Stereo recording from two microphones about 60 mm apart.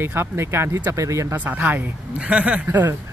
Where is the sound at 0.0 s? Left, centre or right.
Right.